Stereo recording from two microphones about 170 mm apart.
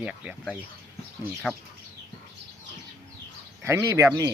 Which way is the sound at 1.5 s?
Centre (ahead or behind).